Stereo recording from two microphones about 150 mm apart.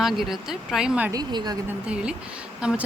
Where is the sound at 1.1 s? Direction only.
25° right (ahead or behind).